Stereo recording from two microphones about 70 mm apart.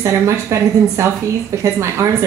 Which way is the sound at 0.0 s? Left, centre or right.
Right.